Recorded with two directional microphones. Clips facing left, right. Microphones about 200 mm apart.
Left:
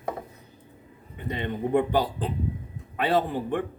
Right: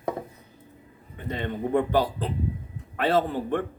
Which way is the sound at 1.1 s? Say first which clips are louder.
Even; 15° left (ahead or behind).